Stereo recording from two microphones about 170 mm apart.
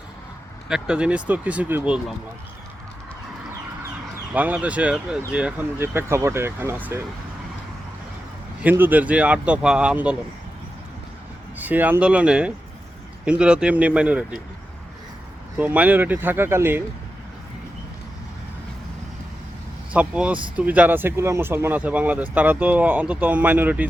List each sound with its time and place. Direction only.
0.7 s speech: 5° right (ahead or behind)
4.4 s speech: 10° right (ahead or behind)
8.6 s speech: 10° right (ahead or behind)
11.5 s speech: 10° right (ahead or behind)
15.5 s speech: 10° right (ahead or behind)
19.9 s speech: 5° right (ahead or behind)